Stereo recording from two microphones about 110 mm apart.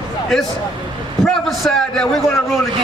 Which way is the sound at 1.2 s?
5° left (ahead or behind).